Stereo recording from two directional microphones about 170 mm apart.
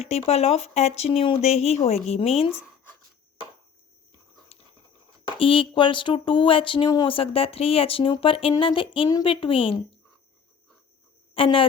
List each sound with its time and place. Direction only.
0.0 s speech: 35° left (ahead or behind)
5.4 s speech: 30° left (ahead or behind)
11.3 s speech: 30° left (ahead or behind)